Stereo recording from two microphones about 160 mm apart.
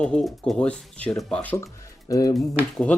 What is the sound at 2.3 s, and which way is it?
Speech, 5° left (ahead or behind).